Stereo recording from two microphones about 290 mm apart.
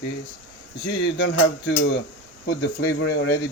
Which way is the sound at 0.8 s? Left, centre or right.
Left.